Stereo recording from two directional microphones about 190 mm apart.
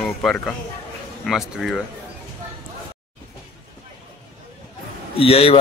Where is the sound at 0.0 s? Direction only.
5° left (ahead or behind).